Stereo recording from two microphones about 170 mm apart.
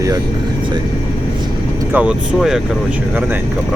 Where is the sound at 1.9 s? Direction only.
5° right (ahead or behind).